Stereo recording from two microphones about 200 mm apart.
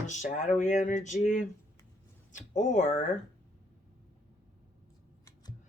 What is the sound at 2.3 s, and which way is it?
Speech, 40° left (ahead or behind).